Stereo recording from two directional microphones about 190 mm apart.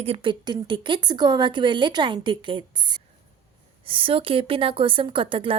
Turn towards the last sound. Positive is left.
turn(degrees=-30)  # may be behind; listen again after turning